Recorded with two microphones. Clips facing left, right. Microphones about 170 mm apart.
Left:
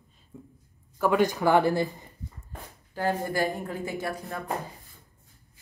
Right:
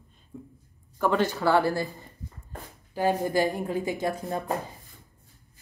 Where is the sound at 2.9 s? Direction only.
15° right (ahead or behind).